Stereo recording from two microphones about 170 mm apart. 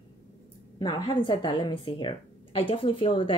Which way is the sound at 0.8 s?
30° left (ahead or behind).